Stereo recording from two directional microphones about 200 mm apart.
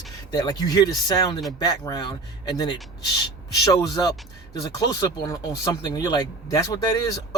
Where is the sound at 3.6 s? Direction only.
20° left (ahead or behind).